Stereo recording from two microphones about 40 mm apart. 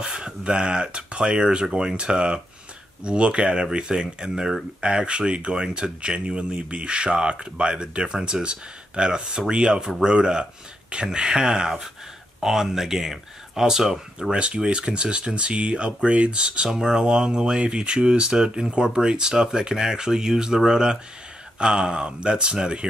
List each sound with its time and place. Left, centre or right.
0.0 s speech: right